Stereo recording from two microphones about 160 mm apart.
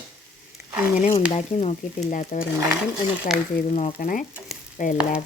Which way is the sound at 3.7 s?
50° left (ahead or behind).